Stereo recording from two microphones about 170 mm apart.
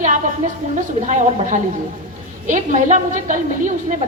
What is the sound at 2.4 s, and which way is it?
A woman's voice, 45° right (ahead or behind).